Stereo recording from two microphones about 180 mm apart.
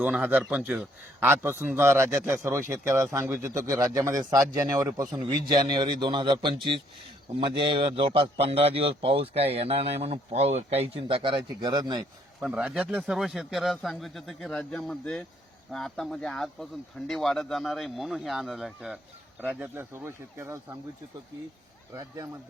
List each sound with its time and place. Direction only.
0.0 s a man's voice: 10° right (ahead or behind)
12.4 s a man's voice: 5° right (ahead or behind)